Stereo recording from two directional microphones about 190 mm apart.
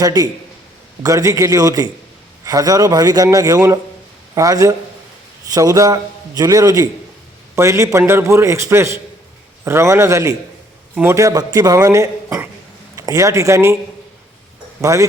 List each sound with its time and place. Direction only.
0.0 s a man's voice: 20° right (ahead or behind)
14.8 s speech: 15° right (ahead or behind)